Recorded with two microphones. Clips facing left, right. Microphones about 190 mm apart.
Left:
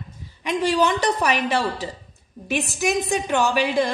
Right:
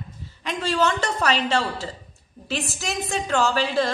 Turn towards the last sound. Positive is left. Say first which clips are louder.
# left 2 dB
turn(degrees=15)  # may be behind; listen again after turning